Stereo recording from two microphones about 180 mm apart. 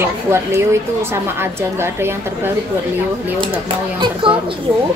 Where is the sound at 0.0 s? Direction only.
15° right (ahead or behind).